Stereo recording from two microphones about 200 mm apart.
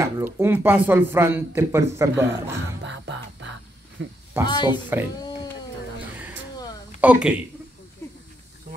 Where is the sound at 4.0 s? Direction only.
70° right (ahead or behind).